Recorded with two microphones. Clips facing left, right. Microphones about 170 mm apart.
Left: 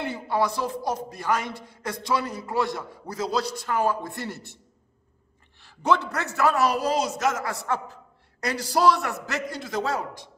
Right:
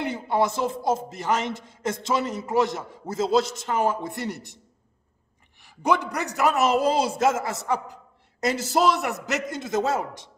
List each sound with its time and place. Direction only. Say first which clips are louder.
0.0 s a man's voice: right 2 dB; 20° right (ahead or behind)
5.6 s a man's voice: even; 15° right (ahead or behind)